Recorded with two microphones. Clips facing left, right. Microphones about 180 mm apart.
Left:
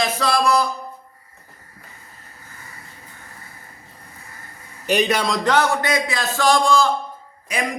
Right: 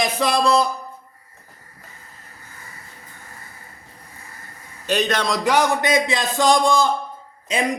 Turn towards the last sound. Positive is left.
turn(degrees=-25)  # may be behind; listen again after turning